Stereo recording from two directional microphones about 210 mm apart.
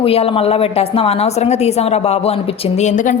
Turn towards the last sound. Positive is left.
turn(degrees=35)  # may be behind; listen again after turning